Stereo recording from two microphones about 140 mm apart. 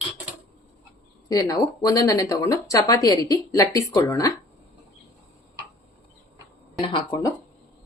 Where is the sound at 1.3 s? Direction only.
25° left (ahead or behind).